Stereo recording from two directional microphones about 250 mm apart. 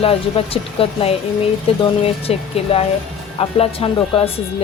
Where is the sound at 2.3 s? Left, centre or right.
Left.